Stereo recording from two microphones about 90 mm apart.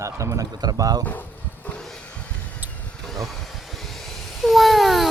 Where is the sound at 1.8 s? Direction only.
5° left (ahead or behind).